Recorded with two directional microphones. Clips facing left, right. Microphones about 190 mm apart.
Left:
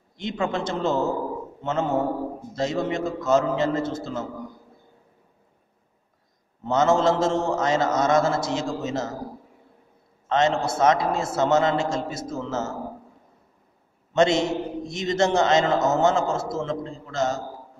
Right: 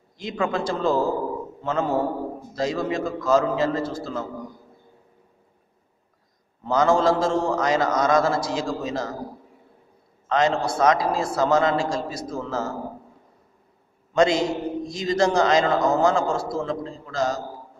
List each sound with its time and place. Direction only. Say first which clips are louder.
0.2 s a man's voice: right 1 dB; 25° left (ahead or behind)
6.6 s a man's voice: right 1 dB; 25° left (ahead or behind)
10.2 s a man's voice: even; 25° left (ahead or behind)
14.1 s a man's voice: even; 25° left (ahead or behind)